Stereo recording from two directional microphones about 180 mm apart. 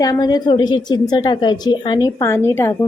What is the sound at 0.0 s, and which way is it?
A woman's voice, 20° left (ahead or behind).